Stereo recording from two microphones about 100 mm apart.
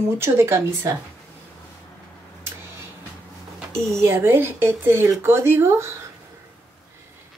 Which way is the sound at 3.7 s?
25° right (ahead or behind).